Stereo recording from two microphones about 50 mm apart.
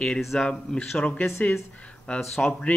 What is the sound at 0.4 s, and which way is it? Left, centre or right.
Speech, centre.